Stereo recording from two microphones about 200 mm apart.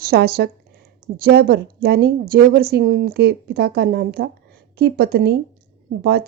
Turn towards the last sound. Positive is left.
turn(degrees=-55)  # may be behind; listen again after turning